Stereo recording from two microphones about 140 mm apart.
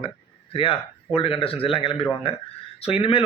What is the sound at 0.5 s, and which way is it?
A man's voice, 40° left (ahead or behind).